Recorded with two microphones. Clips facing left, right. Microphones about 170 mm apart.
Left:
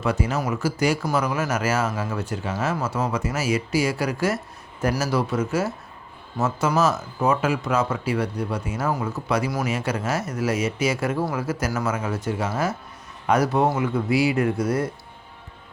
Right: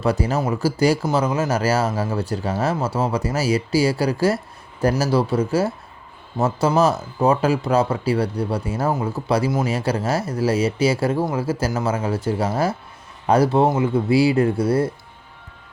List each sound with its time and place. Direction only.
0.0 s speech: 35° right (ahead or behind)